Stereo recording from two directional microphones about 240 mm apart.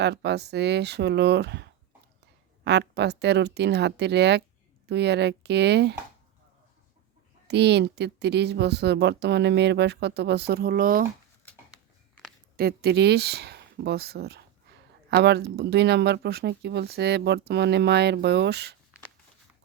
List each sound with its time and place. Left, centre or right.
0.0 s speech: right
2.6 s speech: right
7.4 s speech: right
11.4 s a sound: centre
12.5 s speech: right